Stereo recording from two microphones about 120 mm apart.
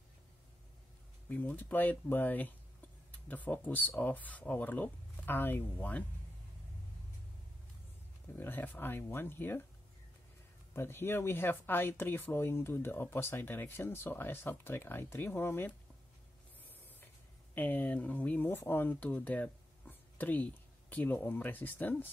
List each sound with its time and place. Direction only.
1.3 s speech: 15° left (ahead or behind)
8.4 s speech: 15° left (ahead or behind)
10.7 s speech: 20° left (ahead or behind)
17.6 s speech: 15° left (ahead or behind)